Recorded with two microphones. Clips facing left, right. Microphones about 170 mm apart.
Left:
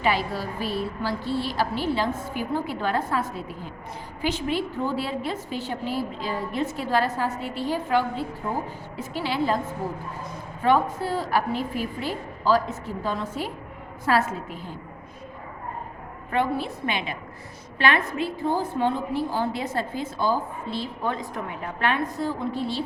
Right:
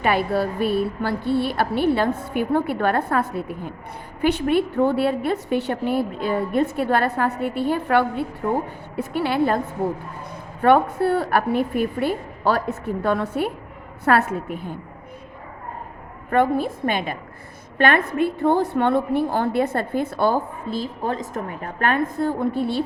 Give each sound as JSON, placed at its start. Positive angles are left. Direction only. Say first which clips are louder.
{"t": 0.0, "sound": "a woman's voice", "louder": "right 5 dB", "side_deg": -55}
{"t": 16.3, "sound": "a woman's voice", "louder": "right 6 dB", "side_deg": -50}
{"t": 20.7, "sound": "a woman's voice", "louder": "right 3 dB", "side_deg": -45}